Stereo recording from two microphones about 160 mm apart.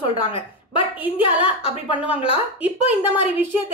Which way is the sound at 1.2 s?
35° left (ahead or behind).